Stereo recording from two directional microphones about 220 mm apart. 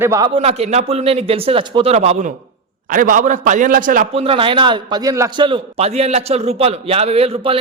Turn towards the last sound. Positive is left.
turn(degrees=-25)  # may be behind; listen again after turning